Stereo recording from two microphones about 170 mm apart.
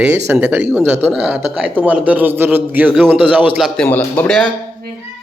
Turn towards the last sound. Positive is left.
turn(degrees=5)  # may be behind; listen again after turning